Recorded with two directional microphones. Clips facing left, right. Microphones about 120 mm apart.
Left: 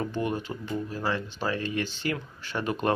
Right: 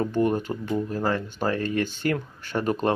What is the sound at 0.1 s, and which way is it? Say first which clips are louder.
Speech: right 6 dB; 45° right (ahead or behind).